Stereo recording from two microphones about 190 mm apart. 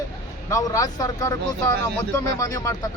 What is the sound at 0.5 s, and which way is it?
Speech, 15° left (ahead or behind).